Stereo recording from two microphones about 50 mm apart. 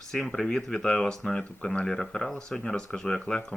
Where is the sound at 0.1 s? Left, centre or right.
Centre.